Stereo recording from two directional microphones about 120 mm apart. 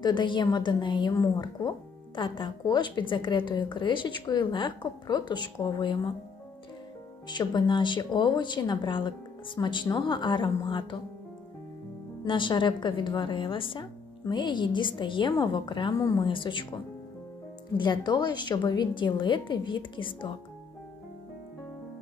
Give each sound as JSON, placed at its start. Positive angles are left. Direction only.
{"t": 0.0, "sound": "a woman's voice", "side_deg": 40}
{"t": 2.1, "sound": "a woman's voice", "side_deg": 45}
{"t": 7.2, "sound": "a woman's voice", "side_deg": 40}
{"t": 12.3, "sound": "a woman's voice", "side_deg": 45}